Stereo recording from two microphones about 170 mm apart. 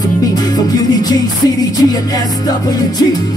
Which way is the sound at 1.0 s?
25° left (ahead or behind).